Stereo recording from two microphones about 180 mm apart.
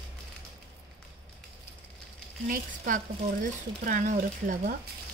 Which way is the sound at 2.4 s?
50° right (ahead or behind).